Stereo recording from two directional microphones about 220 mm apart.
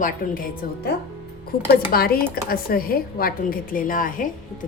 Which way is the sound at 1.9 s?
45° left (ahead or behind).